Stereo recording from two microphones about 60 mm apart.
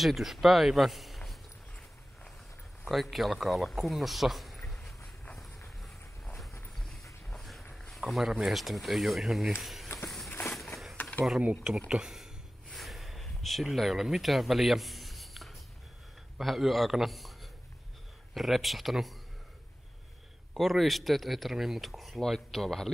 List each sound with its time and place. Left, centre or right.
0.0 s speech: centre
2.8 s speech: centre
5.0 s walk: centre
7.9 s speech: centre
10.0 s run: centre
10.5 s a sound: centre
11.9 s speech: centre
12.7 s a sound: centre
16.3 s a man's voice: centre
20.5 s speech: centre